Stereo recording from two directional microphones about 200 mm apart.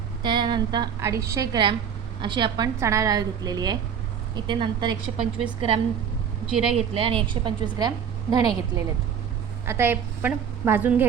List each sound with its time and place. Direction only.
0.2 s a woman's voice: 20° right (ahead or behind)
6.5 s speech: 5° right (ahead or behind)
6.7 s a woman's voice: 30° right (ahead or behind)
9.6 s a woman's voice: 10° right (ahead or behind)